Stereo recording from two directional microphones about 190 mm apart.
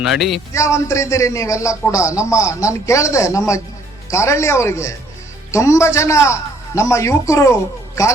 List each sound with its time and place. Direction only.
0.0 s speech: centre (ahead or behind)
0.5 s a man's voice: 15° left (ahead or behind)